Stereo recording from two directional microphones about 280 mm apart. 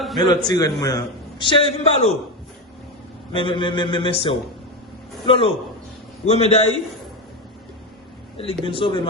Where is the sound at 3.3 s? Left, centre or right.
Centre.